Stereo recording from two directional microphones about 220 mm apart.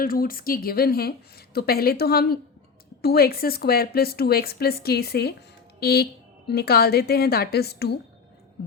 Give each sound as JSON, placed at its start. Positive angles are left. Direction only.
{"t": 0.0, "sound": "a woman's voice", "side_deg": 40}